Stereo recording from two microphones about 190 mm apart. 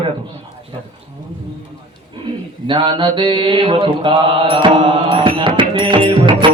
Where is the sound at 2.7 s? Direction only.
25° right (ahead or behind).